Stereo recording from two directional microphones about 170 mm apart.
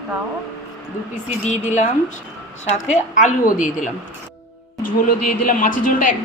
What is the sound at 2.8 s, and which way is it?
Speech, 45° left (ahead or behind).